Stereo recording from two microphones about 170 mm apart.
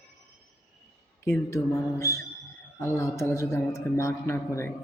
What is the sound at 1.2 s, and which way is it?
A man's voice, 15° left (ahead or behind).